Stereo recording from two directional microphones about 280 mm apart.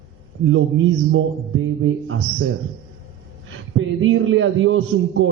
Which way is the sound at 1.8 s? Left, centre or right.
Right.